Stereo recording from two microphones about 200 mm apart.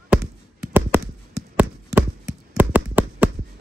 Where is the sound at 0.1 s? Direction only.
10° right (ahead or behind).